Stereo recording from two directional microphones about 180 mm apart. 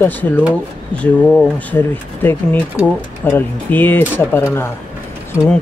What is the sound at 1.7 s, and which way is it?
Speech, 10° left (ahead or behind).